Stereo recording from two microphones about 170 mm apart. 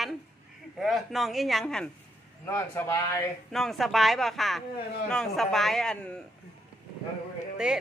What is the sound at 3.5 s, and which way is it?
Speech, centre (ahead or behind).